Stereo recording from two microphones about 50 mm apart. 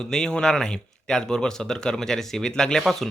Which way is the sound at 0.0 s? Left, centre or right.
Centre.